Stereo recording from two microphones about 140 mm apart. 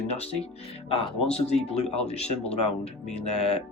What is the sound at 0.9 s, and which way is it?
Speech, 45° left (ahead or behind).